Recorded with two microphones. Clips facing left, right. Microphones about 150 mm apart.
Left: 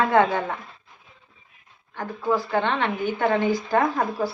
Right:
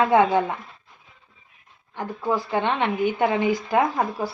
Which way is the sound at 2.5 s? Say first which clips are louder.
Even; 15° right (ahead or behind).